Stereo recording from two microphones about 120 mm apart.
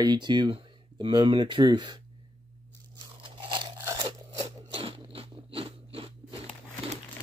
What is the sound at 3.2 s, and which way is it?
Crunch, 45° right (ahead or behind).